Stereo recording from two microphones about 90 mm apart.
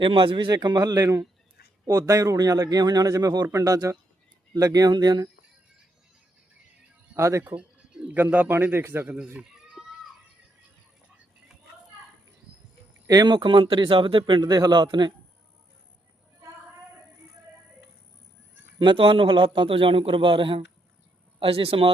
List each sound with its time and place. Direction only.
0.0 s a man's voice: 70° right (ahead or behind); by 5.3 s 50° right (ahead or behind)
7.2 s speech: 30° right (ahead or behind)
7.4 s bird: 10° right (ahead or behind)
8.2 s a man's voice: 20° right (ahead or behind)
9.0 s speech: 10° right (ahead or behind)
9.4 s a sound: 5° right (ahead or behind)
13.1 s speech: 45° right (ahead or behind)
18.8 s a man's voice: 70° right (ahead or behind)
21.3 s speech: 85° right